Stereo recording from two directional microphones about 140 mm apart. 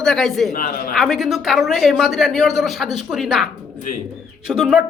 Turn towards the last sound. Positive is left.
turn(degrees=-5)  # may be behind; listen again after turning